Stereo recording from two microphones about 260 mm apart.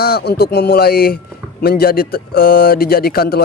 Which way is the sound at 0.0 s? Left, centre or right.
Left.